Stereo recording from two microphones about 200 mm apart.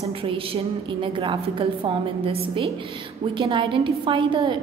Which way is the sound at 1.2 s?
25° right (ahead or behind).